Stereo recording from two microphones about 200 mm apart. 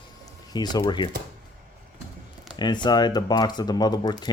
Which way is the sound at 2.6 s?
20° left (ahead or behind).